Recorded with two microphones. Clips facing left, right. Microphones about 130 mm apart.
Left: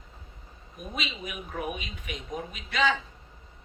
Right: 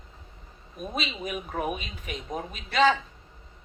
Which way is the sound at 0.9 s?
40° right (ahead or behind).